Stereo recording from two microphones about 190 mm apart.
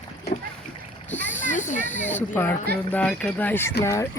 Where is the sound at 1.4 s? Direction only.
40° left (ahead or behind).